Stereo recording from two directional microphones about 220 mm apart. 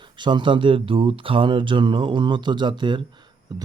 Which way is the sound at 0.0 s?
20° right (ahead or behind).